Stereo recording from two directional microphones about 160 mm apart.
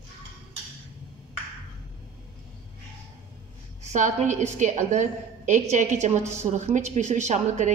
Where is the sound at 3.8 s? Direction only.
50° right (ahead or behind).